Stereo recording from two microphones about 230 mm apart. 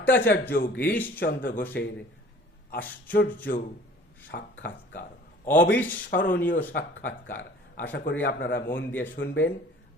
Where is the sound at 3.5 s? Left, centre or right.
Left.